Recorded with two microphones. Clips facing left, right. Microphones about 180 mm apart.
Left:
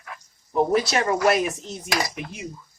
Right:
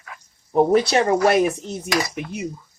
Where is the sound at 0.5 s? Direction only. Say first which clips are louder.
Right 5 dB; 40° right (ahead or behind).